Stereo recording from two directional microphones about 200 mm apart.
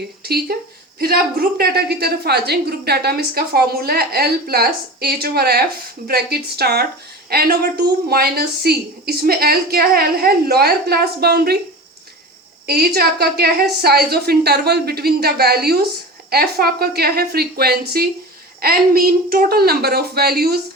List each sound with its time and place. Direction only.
0.2 s a woman's voice: 50° right (ahead or behind)
12.6 s a woman's voice: 50° right (ahead or behind)